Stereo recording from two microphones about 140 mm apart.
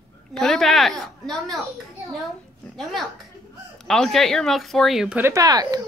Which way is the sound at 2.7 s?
Centre (ahead or behind).